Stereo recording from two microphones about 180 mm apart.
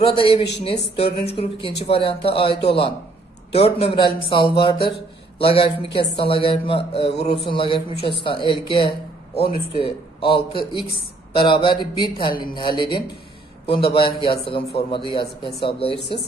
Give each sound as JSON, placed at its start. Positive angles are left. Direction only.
{"t": 0.0, "sound": "a man's voice", "side_deg": 30}